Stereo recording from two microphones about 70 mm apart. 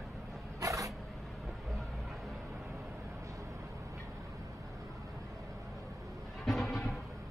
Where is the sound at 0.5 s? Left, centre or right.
Right.